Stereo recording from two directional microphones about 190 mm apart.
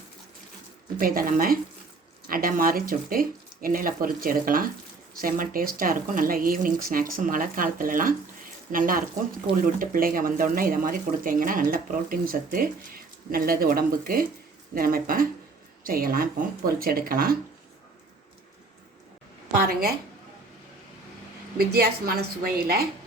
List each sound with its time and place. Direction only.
0.9 s speech: 50° right (ahead or behind)
21.6 s speech: 55° right (ahead or behind)